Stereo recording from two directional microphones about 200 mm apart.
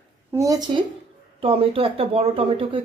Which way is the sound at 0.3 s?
15° right (ahead or behind).